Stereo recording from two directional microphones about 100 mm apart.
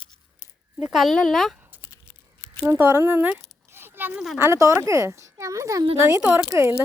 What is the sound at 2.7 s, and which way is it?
Speech, 25° right (ahead or behind).